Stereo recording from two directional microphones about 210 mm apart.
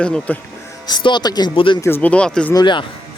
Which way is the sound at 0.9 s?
20° left (ahead or behind).